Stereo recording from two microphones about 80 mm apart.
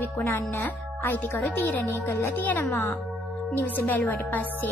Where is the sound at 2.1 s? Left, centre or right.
Left.